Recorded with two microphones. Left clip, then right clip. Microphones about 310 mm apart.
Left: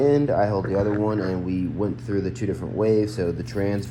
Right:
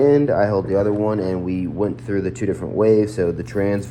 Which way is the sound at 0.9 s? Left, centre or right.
Right.